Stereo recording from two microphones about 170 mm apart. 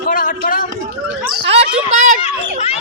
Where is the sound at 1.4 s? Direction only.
40° right (ahead or behind).